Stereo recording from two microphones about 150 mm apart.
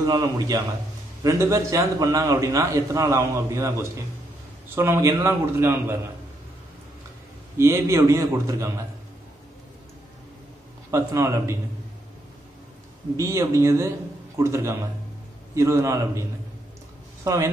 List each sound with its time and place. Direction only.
0.0 s a man's voice: 25° right (ahead or behind)
7.5 s a man's voice: 20° right (ahead or behind)
10.9 s a man's voice: 20° right (ahead or behind)
13.1 s a man's voice: 20° right (ahead or behind)